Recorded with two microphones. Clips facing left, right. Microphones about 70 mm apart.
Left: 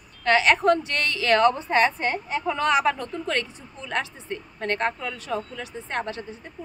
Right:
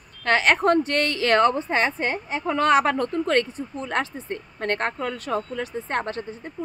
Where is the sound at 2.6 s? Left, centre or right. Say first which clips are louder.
Right 4 dB; right.